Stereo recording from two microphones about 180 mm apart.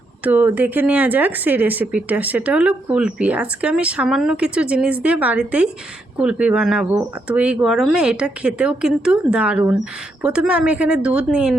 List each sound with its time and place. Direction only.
0.3 s speech: 10° right (ahead or behind)